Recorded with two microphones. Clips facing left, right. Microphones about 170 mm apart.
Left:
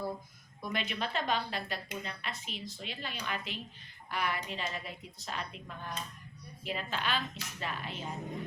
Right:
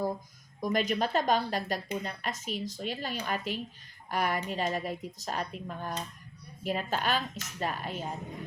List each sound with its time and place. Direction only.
0.6 s speech: 40° right (ahead or behind)